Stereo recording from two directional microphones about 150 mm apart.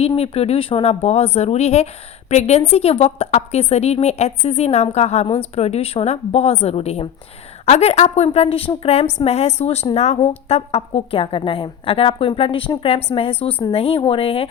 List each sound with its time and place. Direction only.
0.0 s a woman's voice: 45° left (ahead or behind)